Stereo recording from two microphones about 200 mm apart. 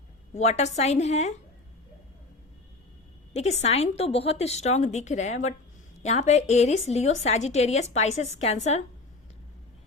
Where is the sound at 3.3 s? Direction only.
35° left (ahead or behind).